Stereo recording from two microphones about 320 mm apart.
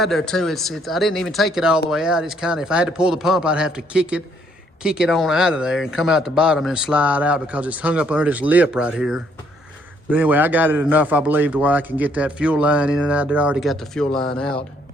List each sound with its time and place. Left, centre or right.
0.0 s a man's voice: centre